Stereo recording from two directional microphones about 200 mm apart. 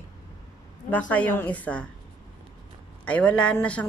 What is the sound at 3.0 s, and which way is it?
Speech, 5° left (ahead or behind).